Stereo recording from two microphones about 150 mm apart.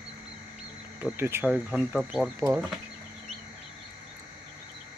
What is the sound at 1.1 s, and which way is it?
Speech, 15° right (ahead or behind).